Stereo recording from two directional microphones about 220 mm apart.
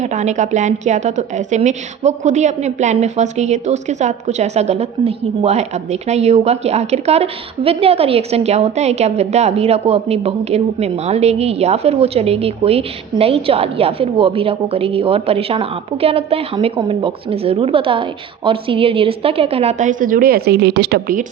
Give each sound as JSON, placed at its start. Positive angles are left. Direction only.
{"t": 0.0, "sound": "a woman's voice", "side_deg": -30}